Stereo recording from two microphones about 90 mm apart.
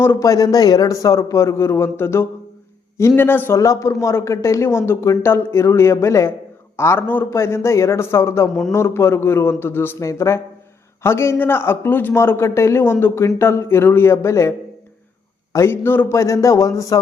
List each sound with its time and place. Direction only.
0.0 s speech: 25° left (ahead or behind)
0.3 s a man's voice: 40° left (ahead or behind); by 3.6 s 25° left (ahead or behind)
3.6 s a man's voice: 35° left (ahead or behind)
15.5 s a man's voice: 25° left (ahead or behind)